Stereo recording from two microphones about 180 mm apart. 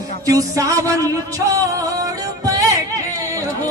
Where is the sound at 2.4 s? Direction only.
20° right (ahead or behind).